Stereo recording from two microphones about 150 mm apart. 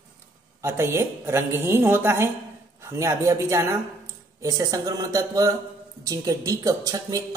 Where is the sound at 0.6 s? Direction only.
15° right (ahead or behind).